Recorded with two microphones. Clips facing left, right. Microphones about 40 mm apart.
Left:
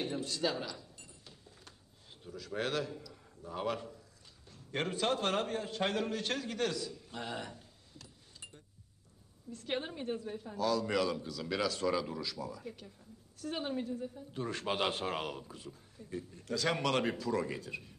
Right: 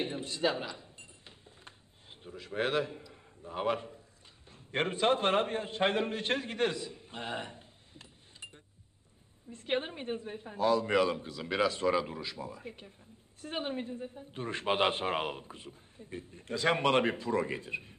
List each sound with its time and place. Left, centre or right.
0.0 s a sound: right
4.5 s a man's voice: right
9.5 s a man's voice: right